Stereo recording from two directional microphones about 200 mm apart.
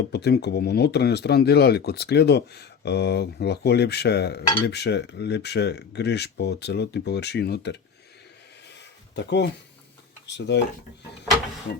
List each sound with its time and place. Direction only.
0.1 s speech: 55° left (ahead or behind)
9.1 s speech: 60° left (ahead or behind)